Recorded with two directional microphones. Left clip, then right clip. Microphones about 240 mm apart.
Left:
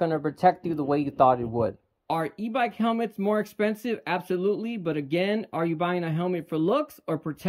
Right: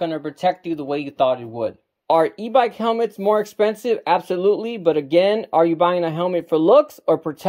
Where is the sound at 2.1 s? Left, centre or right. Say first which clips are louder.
Right 12 dB; centre.